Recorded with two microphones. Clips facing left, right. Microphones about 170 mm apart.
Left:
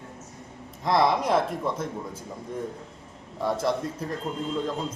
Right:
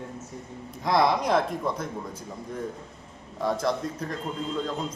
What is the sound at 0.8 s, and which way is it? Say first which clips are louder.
A man's voice: even; centre (ahead or behind).